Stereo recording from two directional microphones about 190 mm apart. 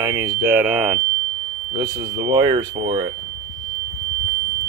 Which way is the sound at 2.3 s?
20° right (ahead or behind).